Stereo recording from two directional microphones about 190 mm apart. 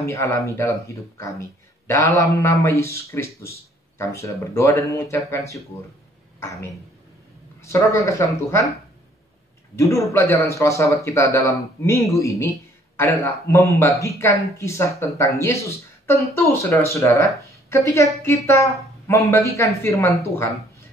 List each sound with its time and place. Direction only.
0.0 s speech: 15° left (ahead or behind)
6.4 s speech: 15° left (ahead or behind)
9.8 s a woman's voice: 15° left (ahead or behind)